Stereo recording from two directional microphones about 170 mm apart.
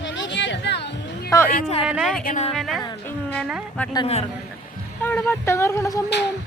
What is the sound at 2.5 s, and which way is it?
Music, centre (ahead or behind).